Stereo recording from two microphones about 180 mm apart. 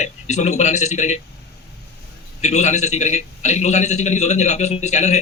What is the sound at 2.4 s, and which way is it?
A man's voice, 40° left (ahead or behind).